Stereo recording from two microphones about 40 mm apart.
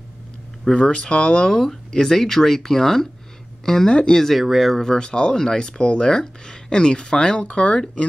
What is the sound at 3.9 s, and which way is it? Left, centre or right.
Speech, left.